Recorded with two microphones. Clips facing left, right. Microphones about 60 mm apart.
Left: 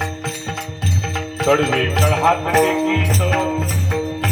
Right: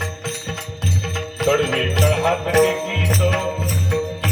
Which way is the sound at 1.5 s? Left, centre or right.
Left.